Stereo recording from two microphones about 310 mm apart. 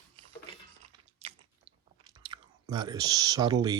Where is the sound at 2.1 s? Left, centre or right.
Centre.